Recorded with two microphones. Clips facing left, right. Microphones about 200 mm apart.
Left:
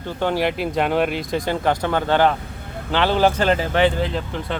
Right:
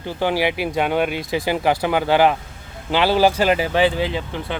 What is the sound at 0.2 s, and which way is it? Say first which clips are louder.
Speech: right 1 dB; 5° right (ahead or behind).